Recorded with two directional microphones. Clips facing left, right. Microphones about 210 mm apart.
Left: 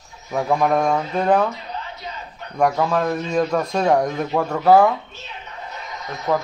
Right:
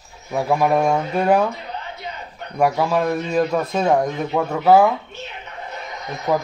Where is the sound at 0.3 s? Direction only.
5° right (ahead or behind).